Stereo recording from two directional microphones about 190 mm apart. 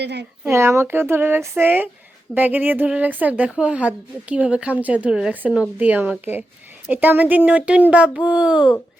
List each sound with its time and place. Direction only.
0.0 s a woman's voice: 60° right (ahead or behind)
0.4 s a woman's voice: 15° right (ahead or behind)